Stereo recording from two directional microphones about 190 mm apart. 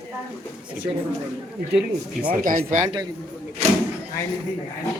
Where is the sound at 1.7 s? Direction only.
5° right (ahead or behind).